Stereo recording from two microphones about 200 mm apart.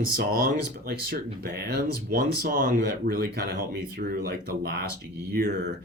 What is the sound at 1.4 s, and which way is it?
Speech, 50° right (ahead or behind).